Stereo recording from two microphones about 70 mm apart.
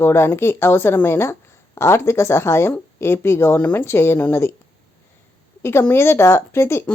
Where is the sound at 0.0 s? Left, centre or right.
Left.